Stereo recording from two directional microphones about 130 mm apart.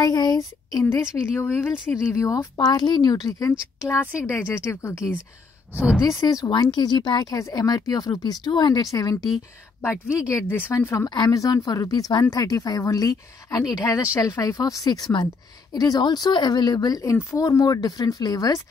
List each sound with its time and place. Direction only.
0.0 s speech: 30° left (ahead or behind)
1.0 s speech: 5° right (ahead or behind)
1.4 s speech: 15° left (ahead or behind)
5.9 s speech: 25° left (ahead or behind)